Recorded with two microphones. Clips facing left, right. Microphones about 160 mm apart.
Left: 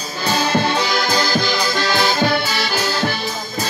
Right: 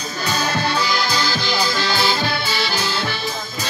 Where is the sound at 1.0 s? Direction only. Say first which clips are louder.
Left 4 dB; 45° left (ahead or behind).